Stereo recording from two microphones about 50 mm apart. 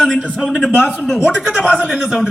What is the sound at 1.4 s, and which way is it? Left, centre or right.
Speech, centre.